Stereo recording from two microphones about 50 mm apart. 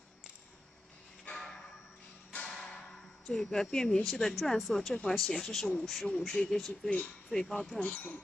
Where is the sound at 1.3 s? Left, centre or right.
Centre.